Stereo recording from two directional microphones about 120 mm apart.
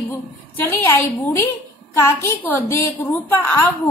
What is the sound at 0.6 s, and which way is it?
A child's voice, 20° left (ahead or behind).